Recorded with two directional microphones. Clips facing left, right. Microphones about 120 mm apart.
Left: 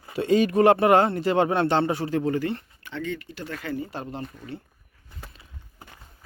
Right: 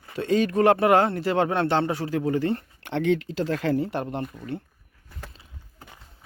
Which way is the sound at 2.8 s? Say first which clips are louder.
Right 9 dB; 70° right (ahead or behind).